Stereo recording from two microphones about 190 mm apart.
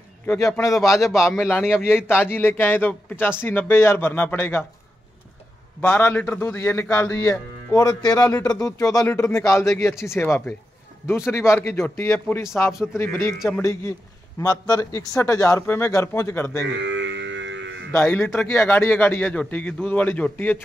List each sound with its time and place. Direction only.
0.3 s a man's voice: 15° left (ahead or behind)
1.1 s speech: centre (ahead or behind)
1.4 s a man's voice: 10° left (ahead or behind)
5.8 s a man's voice: 10° left (ahead or behind)
16.8 s music: 70° right (ahead or behind)
17.9 s a man's voice: 10° left (ahead or behind)